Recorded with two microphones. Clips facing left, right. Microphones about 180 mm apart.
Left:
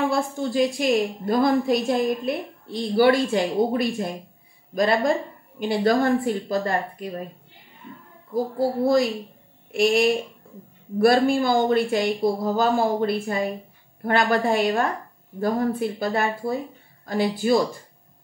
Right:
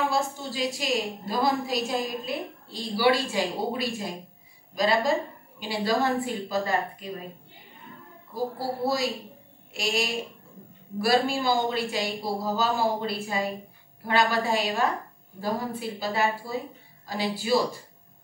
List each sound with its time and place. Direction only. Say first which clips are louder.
0.1 s a woman's voice: left 5 dB; 50° left (ahead or behind)
8.5 s a woman's voice: left 9 dB; 50° left (ahead or behind)